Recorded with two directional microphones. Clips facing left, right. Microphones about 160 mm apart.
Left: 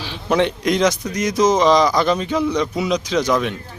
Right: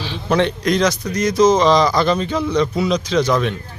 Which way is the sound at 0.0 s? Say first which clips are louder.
Right 1 dB; 10° left (ahead or behind).